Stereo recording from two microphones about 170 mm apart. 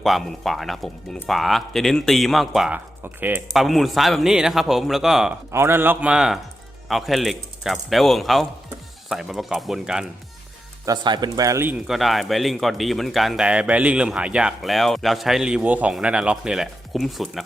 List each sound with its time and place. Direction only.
0.0 s speech: centre (ahead or behind)
3.5 s speech: centre (ahead or behind)
5.5 s a man's voice: 15° right (ahead or behind)
10.8 s speech: 25° right (ahead or behind)
11.9 s speech: centre (ahead or behind)